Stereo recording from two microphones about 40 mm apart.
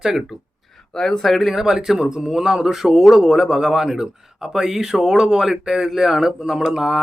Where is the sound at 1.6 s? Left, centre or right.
Centre.